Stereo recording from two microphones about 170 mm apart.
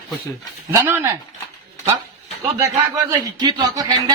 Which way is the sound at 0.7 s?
15° right (ahead or behind).